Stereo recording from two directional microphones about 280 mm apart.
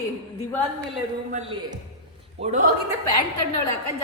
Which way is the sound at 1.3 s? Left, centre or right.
Right.